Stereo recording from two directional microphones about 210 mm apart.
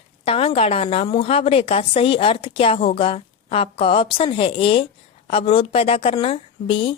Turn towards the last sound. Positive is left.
turn(degrees=25)  # may be behind; listen again after turning